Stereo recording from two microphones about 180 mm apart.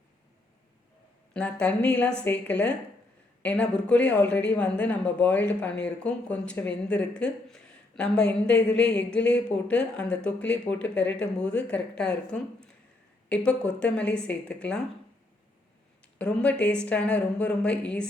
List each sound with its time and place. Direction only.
1.3 s a woman's voice: 5° left (ahead or behind)
8.2 s a woman's voice: 70° left (ahead or behind)
8.6 s a woman's voice: 5° left (ahead or behind)
16.1 s a woman's voice: 5° left (ahead or behind)